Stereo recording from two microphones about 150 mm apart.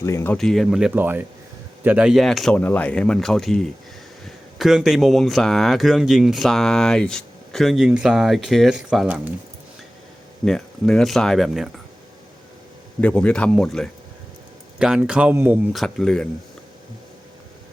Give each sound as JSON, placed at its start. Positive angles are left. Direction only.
{"t": 0.0, "sound": "speech", "side_deg": 15}
{"t": 0.3, "sound": "speech", "side_deg": 0}
{"t": 10.4, "sound": "speech", "side_deg": 5}
{"t": 13.0, "sound": "a man's voice", "side_deg": 10}
{"t": 15.7, "sound": "speech", "side_deg": 0}